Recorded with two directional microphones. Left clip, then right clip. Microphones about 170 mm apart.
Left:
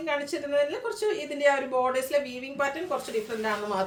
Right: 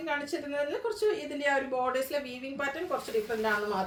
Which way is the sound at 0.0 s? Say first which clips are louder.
Left 3 dB; 15° left (ahead or behind).